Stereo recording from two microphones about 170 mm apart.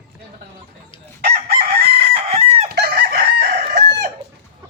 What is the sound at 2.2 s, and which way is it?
Chicken, 35° right (ahead or behind).